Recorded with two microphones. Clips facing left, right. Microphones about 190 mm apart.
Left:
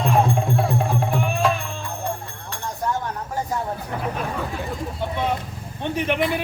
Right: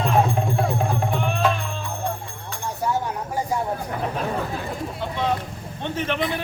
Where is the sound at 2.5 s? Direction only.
10° right (ahead or behind).